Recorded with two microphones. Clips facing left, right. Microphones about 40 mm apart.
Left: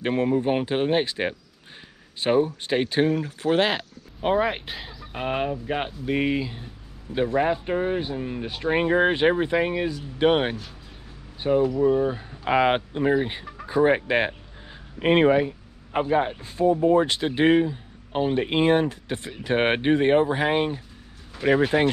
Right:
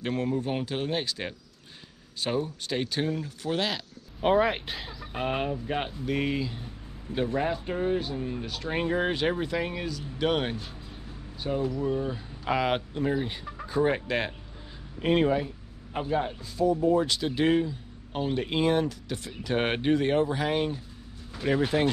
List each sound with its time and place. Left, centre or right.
0.0 s speech: left
4.2 s speech: centre; by 21.9 s left